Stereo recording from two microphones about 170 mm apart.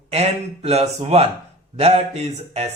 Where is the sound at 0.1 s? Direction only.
40° right (ahead or behind).